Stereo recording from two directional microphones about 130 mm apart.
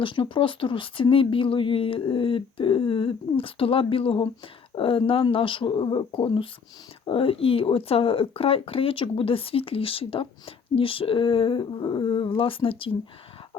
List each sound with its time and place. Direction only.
0.0 s speech: 40° left (ahead or behind)